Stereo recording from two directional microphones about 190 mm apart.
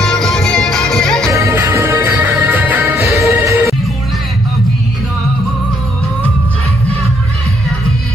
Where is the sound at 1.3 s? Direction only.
15° right (ahead or behind).